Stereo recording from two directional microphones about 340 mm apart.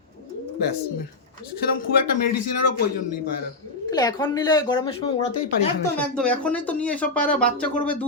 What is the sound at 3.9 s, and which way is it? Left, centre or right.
Speech, centre.